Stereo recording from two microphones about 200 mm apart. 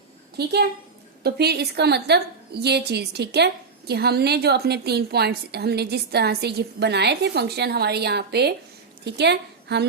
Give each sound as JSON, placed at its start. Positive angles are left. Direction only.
{"t": 1.2, "sound": "a woman's voice", "side_deg": -55}